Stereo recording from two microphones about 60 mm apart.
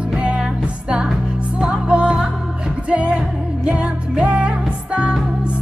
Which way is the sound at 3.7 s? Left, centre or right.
Centre.